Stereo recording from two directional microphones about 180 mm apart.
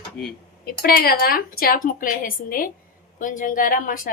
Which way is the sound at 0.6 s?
55° left (ahead or behind).